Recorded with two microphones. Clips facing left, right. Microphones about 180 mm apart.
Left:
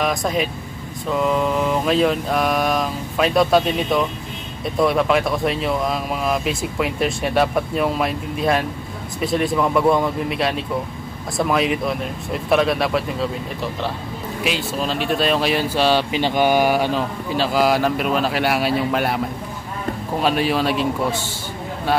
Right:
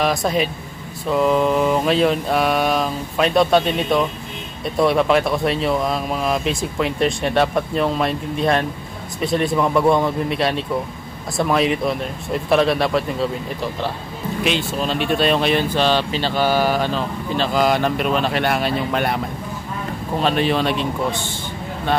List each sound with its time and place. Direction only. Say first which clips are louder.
0.0 s speech: right 2 dB; centre (ahead or behind)